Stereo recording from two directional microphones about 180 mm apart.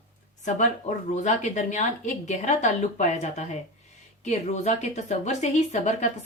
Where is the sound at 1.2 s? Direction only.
40° left (ahead or behind).